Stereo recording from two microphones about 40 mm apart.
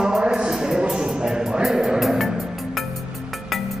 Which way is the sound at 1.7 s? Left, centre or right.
Centre.